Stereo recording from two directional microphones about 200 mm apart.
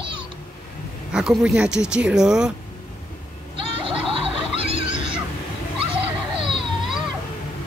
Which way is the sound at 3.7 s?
25° right (ahead or behind).